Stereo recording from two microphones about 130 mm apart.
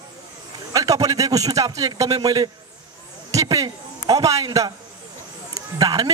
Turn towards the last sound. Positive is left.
turn(degrees=-30)  # may be behind; listen again after turning